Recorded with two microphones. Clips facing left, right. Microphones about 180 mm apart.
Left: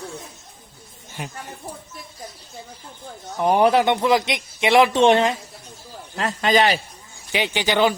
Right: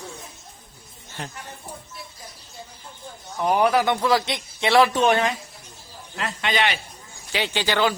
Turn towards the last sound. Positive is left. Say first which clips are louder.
# left 3 dB
turn(degrees=20)  # may be behind; listen again after turning